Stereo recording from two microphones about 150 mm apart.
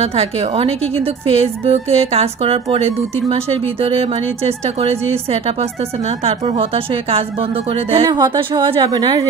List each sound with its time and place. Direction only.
0.0 s a woman's voice: 45° right (ahead or behind)
8.1 s a woman's voice: 30° right (ahead or behind)